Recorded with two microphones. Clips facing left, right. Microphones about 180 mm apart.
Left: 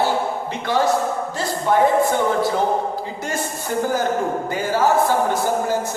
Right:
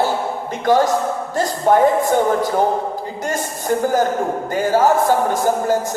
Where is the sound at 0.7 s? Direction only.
45° right (ahead or behind).